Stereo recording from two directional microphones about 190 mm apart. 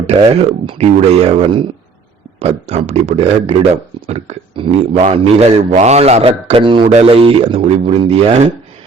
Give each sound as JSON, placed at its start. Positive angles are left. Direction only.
{"t": 0.1, "sound": "speech", "side_deg": -35}